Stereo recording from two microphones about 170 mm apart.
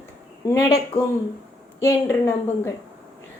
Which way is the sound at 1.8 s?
15° left (ahead or behind).